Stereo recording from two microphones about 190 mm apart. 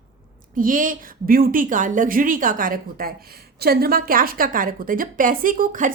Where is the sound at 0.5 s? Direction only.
45° right (ahead or behind).